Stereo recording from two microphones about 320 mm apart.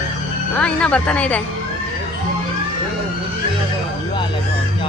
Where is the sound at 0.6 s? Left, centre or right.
Centre.